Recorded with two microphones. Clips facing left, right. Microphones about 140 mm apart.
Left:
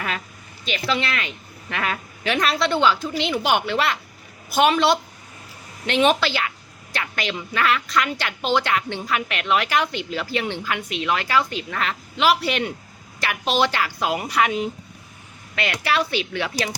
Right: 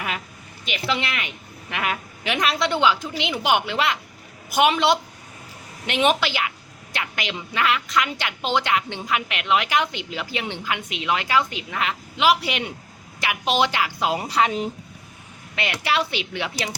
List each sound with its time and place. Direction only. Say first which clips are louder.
0.9 s a woman's voice: left 1 dB; 15° right (ahead or behind); by 14.7 s 35° right (ahead or behind)
15.5 s speech: left 1 dB; 20° right (ahead or behind)